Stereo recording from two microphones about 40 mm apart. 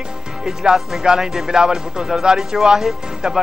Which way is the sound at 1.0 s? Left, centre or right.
Centre.